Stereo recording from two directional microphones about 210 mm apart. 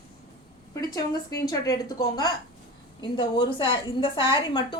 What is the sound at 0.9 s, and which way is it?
A woman's voice, 15° left (ahead or behind).